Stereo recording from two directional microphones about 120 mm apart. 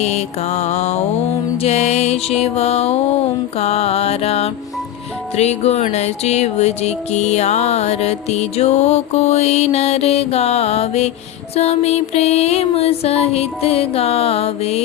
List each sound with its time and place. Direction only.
0.0 s music: 65° left (ahead or behind)